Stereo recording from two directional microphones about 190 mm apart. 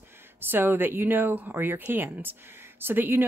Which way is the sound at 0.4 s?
10° right (ahead or behind).